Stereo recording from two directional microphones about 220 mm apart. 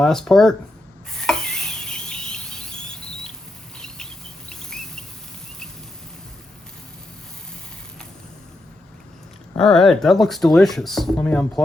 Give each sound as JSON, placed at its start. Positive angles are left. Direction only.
{"t": 0.0, "sound": "speech", "side_deg": 0}
{"t": 1.2, "sound": "stir", "side_deg": 0}
{"t": 3.8, "sound": "rodents", "side_deg": 5}
{"t": 9.6, "sound": "speech", "side_deg": 0}